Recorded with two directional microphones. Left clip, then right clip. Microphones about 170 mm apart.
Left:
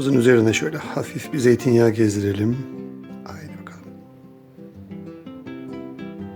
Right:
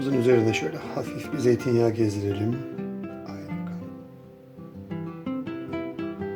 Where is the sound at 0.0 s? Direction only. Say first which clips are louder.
Left 5 dB; 50° left (ahead or behind).